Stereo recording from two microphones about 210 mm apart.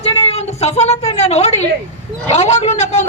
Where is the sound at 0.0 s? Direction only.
30° left (ahead or behind).